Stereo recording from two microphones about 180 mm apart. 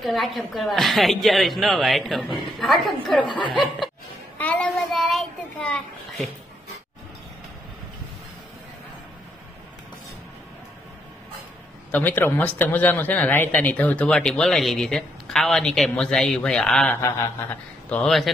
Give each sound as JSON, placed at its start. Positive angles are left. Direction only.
{"t": 0.0, "sound": "a woman's voice", "side_deg": 0}
{"t": 3.2, "sound": "speech", "side_deg": 25}
{"t": 4.4, "sound": "child singing", "side_deg": 10}
{"t": 11.9, "sound": "speech", "side_deg": 10}